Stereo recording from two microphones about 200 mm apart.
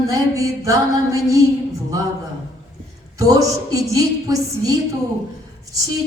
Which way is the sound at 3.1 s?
15° right (ahead or behind).